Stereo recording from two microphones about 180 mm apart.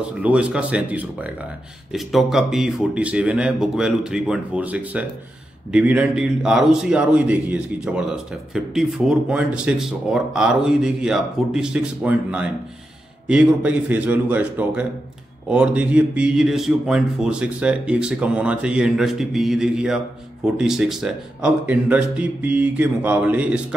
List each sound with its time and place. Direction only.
0.2 s a man's voice: 5° right (ahead or behind)